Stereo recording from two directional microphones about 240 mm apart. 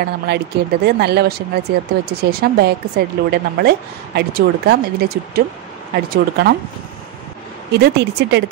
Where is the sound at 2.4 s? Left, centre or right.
Right.